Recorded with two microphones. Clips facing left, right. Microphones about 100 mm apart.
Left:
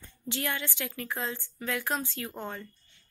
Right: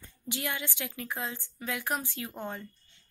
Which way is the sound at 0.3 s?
15° right (ahead or behind).